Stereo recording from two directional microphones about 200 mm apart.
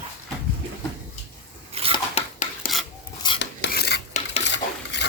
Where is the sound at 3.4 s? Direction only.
55° left (ahead or behind).